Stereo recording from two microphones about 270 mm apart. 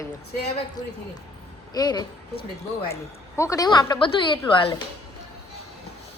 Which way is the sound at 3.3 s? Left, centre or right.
Centre.